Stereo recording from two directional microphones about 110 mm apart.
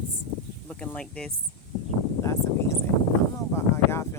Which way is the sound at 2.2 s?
25° left (ahead or behind).